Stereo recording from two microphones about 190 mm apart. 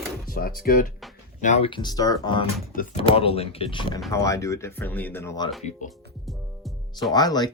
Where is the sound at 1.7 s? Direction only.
20° left (ahead or behind).